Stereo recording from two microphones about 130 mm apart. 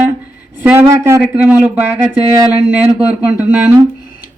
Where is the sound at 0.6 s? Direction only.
10° right (ahead or behind).